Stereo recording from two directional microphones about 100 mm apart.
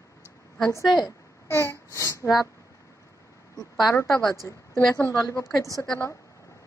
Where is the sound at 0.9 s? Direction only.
Centre (ahead or behind).